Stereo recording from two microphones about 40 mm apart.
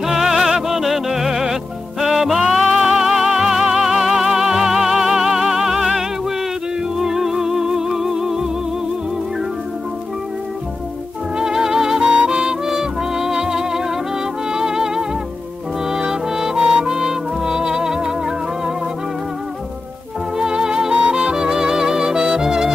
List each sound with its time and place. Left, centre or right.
0.0 s music: centre
11.3 s music: centre
20.3 s music: centre